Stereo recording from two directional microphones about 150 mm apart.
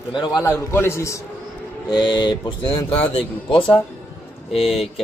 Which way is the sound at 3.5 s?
10° left (ahead or behind).